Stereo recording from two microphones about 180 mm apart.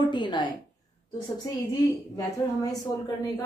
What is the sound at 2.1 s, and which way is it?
A woman's voice, 20° left (ahead or behind).